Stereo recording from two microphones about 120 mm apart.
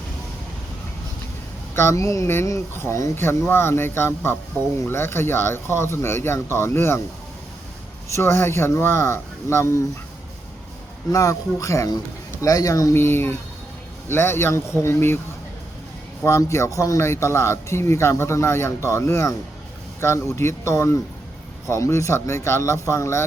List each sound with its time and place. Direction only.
1.7 s speech: 20° left (ahead or behind)
8.0 s speech: 25° left (ahead or behind)
11.1 s speech: 30° left (ahead or behind)
16.2 s speech: 25° left (ahead or behind)